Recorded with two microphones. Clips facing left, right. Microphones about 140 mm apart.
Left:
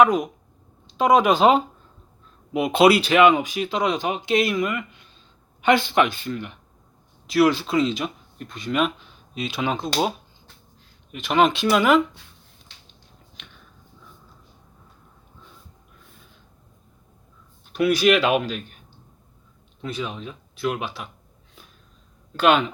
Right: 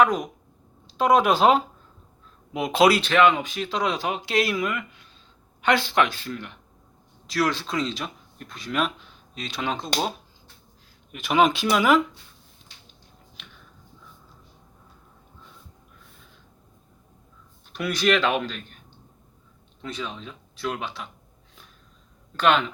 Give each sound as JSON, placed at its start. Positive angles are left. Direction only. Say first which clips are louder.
{"t": 0.0, "sound": "speech", "louder": "left 3 dB", "side_deg": 5}
{"t": 13.4, "sound": "a sound", "louder": "left 1 dB", "side_deg": -5}
{"t": 17.7, "sound": "speech", "louder": "left 5 dB", "side_deg": 5}
{"t": 19.8, "sound": "speech", "louder": "left 4 dB", "side_deg": 10}
{"t": 22.4, "sound": "speech", "louder": "left 3 dB", "side_deg": 10}